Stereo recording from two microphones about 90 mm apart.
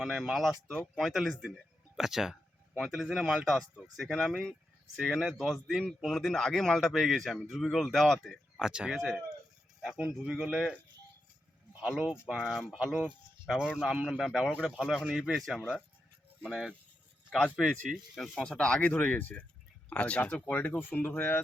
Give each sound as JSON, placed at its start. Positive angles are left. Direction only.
{"t": 0.0, "sound": "a man's voice", "side_deg": -5}
{"t": 8.6, "sound": "a man's voice", "side_deg": -10}
{"t": 11.8, "sound": "a man's voice", "side_deg": -10}
{"t": 17.2, "sound": "speech", "side_deg": 15}
{"t": 17.6, "sound": "a man's voice", "side_deg": -5}
{"t": 18.2, "sound": "speech", "side_deg": 10}